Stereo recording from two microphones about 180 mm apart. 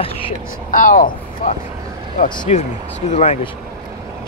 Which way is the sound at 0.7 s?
50° left (ahead or behind).